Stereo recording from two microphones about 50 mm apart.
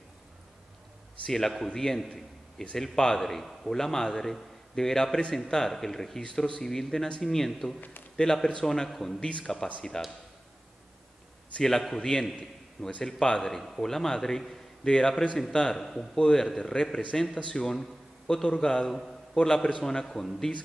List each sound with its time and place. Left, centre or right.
1.3 s a man's voice: centre
6.2 s a man's voice: centre
11.8 s a man's voice: centre
15.7 s a man's voice: centre
16.2 s a man's voice: centre